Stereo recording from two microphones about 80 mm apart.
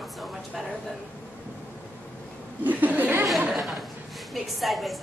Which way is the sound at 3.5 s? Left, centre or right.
Centre.